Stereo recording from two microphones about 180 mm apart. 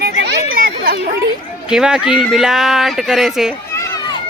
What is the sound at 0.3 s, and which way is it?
Chatter, 55° right (ahead or behind).